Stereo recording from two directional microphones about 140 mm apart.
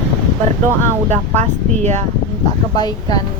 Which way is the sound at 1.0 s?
55° right (ahead or behind).